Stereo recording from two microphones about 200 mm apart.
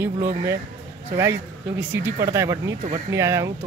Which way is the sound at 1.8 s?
10° right (ahead or behind).